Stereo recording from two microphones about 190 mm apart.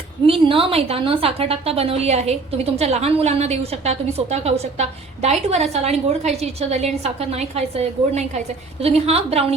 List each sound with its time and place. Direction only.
0.3 s a woman's voice: 30° right (ahead or behind)